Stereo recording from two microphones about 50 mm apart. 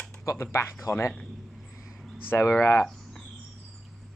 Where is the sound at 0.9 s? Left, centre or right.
Left.